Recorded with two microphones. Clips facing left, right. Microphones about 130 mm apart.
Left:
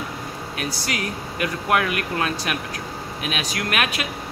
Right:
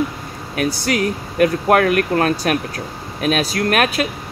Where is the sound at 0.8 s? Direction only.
45° right (ahead or behind).